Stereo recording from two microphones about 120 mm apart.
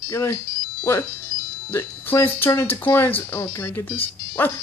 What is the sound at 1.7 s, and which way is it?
Speech, 20° left (ahead or behind).